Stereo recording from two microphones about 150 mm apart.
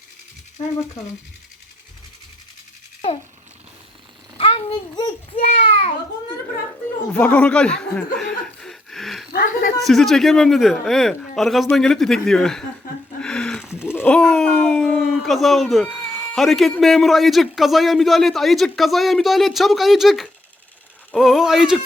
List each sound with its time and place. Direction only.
4.4 s a child's voice: 40° left (ahead or behind)
5.4 s a child's voice: 40° left (ahead or behind)
7.1 s speech: 10° left (ahead or behind)
9.3 s a woman's voice: 75° left (ahead or behind)
9.8 s a man's voice: centre (ahead or behind)
13.2 s a sound: 5° left (ahead or behind)
13.9 s a man's voice: 10° left (ahead or behind)